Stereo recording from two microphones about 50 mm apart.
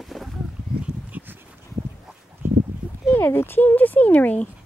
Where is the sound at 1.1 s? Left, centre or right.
Right.